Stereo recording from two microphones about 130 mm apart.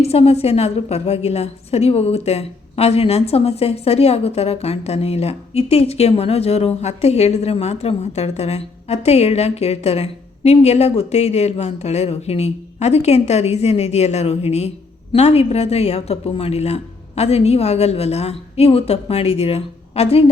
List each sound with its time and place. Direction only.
0.0 s a woman's voice: 50° left (ahead or behind)